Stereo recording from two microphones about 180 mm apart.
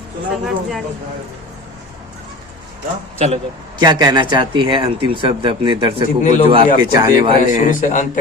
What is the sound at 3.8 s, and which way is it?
Speech, 25° right (ahead or behind).